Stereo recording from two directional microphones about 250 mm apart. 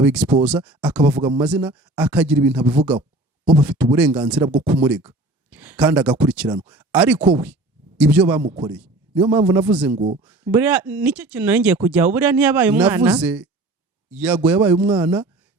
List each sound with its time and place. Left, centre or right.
0.0 s speech: centre
4.4 s a man's voice: centre
4.8 s speech: centre
8.4 s a man's voice: centre
9.6 s speech: centre
9.9 s a man's voice: right
10.2 s speech: centre